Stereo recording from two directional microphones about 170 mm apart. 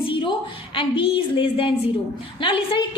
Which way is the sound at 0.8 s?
30° left (ahead or behind).